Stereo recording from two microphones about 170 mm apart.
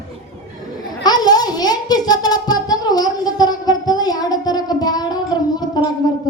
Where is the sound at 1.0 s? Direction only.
25° left (ahead or behind).